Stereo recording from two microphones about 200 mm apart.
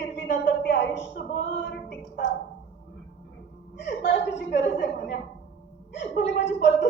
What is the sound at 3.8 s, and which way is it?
A woman's voice, 60° left (ahead or behind).